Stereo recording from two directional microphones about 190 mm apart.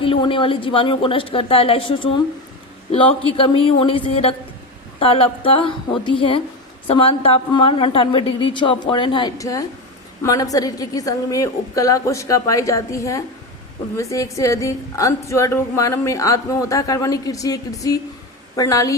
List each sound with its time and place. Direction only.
0.0 s a woman's voice: 30° left (ahead or behind)